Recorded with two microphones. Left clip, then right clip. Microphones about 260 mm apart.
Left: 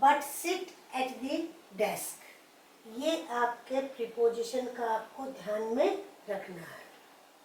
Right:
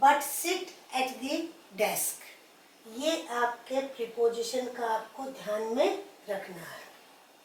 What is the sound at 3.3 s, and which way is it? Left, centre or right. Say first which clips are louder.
A woman's voice: right 1 dB; centre.